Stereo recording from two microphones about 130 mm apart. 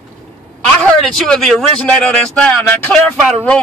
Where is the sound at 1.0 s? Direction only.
5° left (ahead or behind).